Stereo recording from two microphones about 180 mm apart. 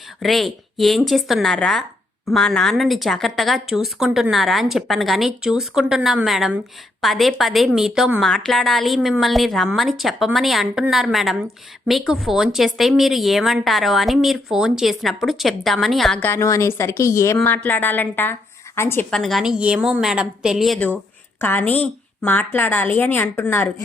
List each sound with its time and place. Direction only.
0.2 s a woman's voice: centre (ahead or behind)
16.3 s a woman's voice: 15° left (ahead or behind)
19.1 s a woman's voice: centre (ahead or behind)